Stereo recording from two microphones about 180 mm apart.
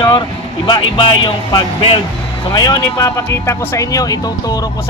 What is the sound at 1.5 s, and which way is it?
Speech, 30° left (ahead or behind).